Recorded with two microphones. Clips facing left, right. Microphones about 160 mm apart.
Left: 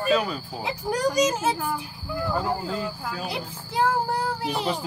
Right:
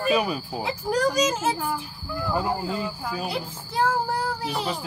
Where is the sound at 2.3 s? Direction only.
10° right (ahead or behind).